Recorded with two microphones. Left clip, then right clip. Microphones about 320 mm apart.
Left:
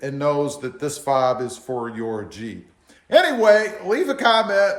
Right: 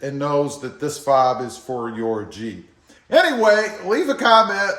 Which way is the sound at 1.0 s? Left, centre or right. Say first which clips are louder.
Right 3 dB; centre.